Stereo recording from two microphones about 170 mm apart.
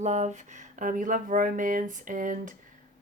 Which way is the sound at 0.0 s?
45° right (ahead or behind).